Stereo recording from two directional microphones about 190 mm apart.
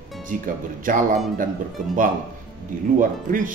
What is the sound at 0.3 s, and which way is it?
Speech, 45° right (ahead or behind).